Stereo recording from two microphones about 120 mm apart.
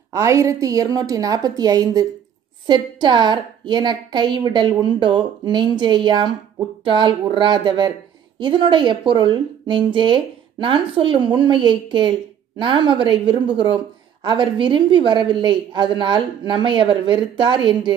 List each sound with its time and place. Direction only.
0.1 s a woman's voice: 25° right (ahead or behind); by 17.9 s 40° right (ahead or behind)